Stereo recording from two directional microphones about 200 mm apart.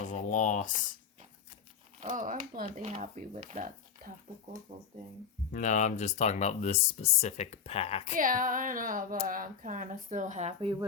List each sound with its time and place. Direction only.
0.0 s speech: 40° left (ahead or behind)
2.0 s speech: 40° right (ahead or behind)
5.5 s speech: 40° left (ahead or behind)
8.1 s speech: 45° right (ahead or behind)